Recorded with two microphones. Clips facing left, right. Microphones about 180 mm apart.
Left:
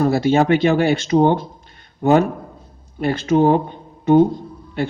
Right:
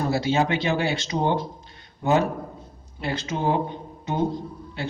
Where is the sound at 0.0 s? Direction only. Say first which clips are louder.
Left 7 dB; 55° left (ahead or behind).